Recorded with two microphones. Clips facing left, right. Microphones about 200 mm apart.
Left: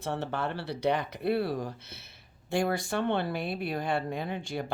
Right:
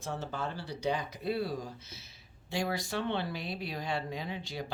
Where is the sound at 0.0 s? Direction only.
65° left (ahead or behind).